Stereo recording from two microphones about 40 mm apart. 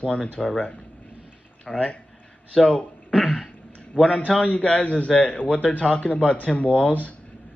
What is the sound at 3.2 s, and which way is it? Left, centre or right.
Throat clearing, centre.